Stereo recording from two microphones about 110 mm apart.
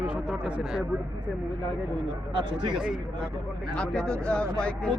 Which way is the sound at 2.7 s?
5° right (ahead or behind).